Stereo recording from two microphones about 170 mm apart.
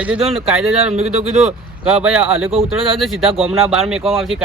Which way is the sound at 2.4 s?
35° right (ahead or behind).